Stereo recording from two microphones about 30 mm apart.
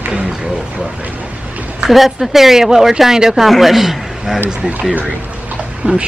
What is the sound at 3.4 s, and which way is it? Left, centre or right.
Speech, centre.